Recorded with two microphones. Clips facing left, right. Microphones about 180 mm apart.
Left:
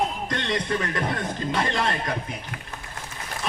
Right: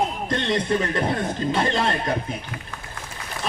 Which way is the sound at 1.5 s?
25° right (ahead or behind).